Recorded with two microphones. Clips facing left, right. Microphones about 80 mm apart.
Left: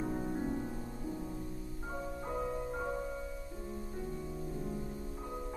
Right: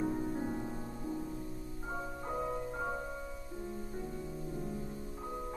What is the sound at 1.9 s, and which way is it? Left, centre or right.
Music, centre.